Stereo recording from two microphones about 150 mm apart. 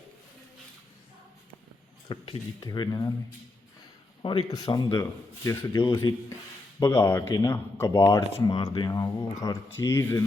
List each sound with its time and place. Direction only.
2.0 s speech: 40° left (ahead or behind)
2.6 s speech: 25° left (ahead or behind)
4.2 s speech: 30° left (ahead or behind); by 10.2 s 15° left (ahead or behind)